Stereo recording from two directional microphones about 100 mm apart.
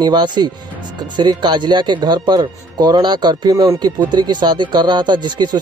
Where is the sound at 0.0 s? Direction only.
50° right (ahead or behind).